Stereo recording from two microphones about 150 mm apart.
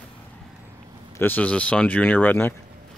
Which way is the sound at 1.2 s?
10° left (ahead or behind).